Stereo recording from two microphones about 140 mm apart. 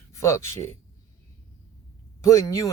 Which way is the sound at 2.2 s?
25° left (ahead or behind).